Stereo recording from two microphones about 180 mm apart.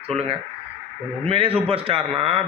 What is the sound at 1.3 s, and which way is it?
Speech, 30° right (ahead or behind).